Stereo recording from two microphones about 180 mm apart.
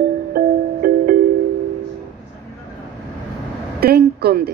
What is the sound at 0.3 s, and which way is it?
Music, 55° right (ahead or behind).